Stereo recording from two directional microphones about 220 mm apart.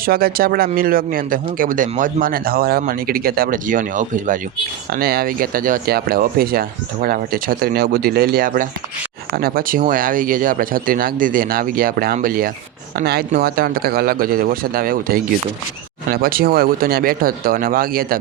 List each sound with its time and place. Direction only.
0.0 s a man's voice: 45° right (ahead or behind)